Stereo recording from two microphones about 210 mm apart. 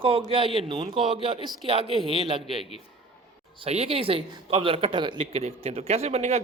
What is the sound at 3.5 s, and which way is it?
Speech, 30° right (ahead or behind).